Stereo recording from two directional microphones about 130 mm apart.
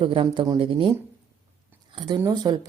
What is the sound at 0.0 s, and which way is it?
Speech, 40° right (ahead or behind).